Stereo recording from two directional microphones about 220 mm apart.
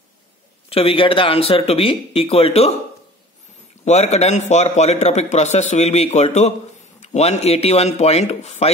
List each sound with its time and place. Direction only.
0.7 s speech: 25° left (ahead or behind)
3.8 s a man's voice: 30° left (ahead or behind)